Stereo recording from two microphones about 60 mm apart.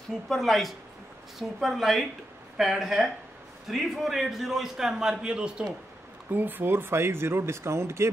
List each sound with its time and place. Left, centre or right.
0.3 s a man's voice: centre
6.3 s speech: right